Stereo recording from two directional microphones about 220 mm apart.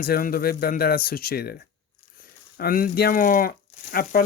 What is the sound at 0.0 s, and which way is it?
Speech, 40° left (ahead or behind).